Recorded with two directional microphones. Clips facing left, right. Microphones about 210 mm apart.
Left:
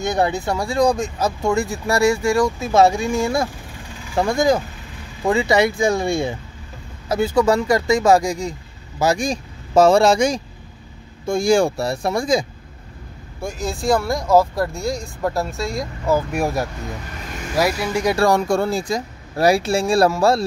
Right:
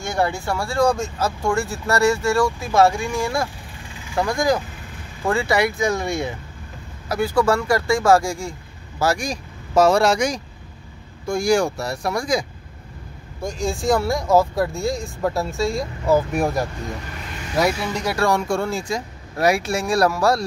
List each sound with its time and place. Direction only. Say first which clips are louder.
0.0 s speech: left 3 dB; 20° left (ahead or behind)
13.4 s speech: right 1 dB; 5° left (ahead or behind)
18.1 s speech: left 2 dB; 40° left (ahead or behind)